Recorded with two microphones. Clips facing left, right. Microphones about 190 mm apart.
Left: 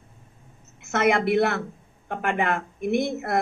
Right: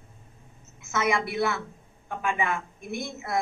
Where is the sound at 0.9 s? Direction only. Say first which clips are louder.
Left 6 dB; 60° left (ahead or behind).